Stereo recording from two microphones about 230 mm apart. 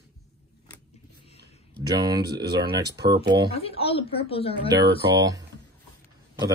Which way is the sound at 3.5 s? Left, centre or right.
Left.